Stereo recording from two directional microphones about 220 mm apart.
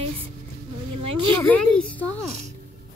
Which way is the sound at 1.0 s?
25° right (ahead or behind).